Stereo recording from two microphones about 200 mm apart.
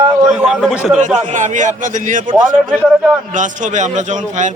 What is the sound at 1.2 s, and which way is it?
A man's voice, 40° right (ahead or behind).